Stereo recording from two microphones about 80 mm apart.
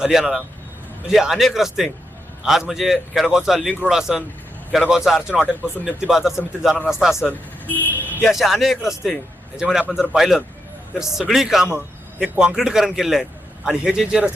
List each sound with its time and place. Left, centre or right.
0.0 s a man's voice: centre
7.3 s speech: left
8.2 s a man's voice: centre